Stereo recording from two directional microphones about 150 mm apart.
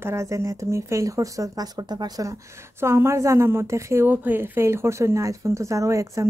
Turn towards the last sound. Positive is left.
turn(degrees=-20)  # may be behind; listen again after turning